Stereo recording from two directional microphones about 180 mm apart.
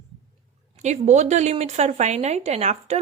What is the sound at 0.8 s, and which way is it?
Speech, 40° right (ahead or behind).